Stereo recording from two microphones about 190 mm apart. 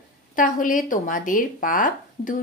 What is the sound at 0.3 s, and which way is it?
A woman's voice, 45° left (ahead or behind).